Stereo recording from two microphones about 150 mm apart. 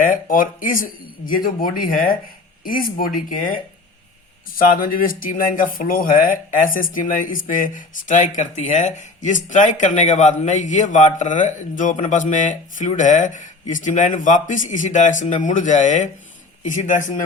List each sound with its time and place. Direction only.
0.0 s speech: 65° left (ahead or behind)